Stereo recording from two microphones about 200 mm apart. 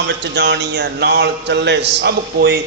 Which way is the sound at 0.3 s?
60° right (ahead or behind).